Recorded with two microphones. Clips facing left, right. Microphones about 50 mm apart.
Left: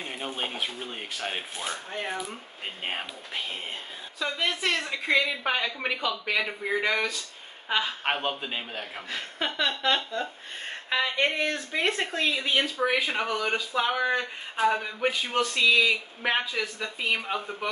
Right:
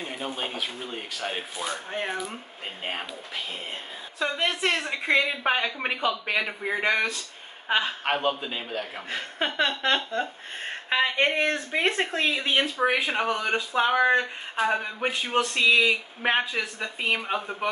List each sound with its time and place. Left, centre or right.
0.0 s speech: centre
1.9 s speech: centre
4.2 s a woman's voice: right
8.0 s a man's voice: centre
9.1 s speech: right
13.9 s speech: right